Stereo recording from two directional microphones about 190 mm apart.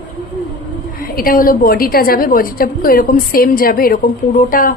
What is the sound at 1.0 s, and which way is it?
A woman's voice, 50° left (ahead or behind).